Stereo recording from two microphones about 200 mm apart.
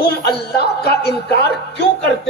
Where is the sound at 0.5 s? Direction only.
55° left (ahead or behind).